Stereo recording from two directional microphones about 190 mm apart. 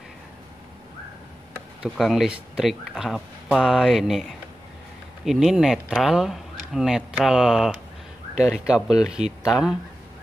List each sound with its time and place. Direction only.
1.8 s speech: centre (ahead or behind)
8.4 s speech: 35° right (ahead or behind)
8.6 s speech: 5° right (ahead or behind)